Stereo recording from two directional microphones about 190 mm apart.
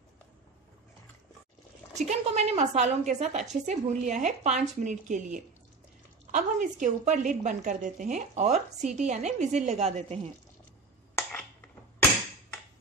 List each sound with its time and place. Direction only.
2.0 s a woman's voice: 35° right (ahead or behind)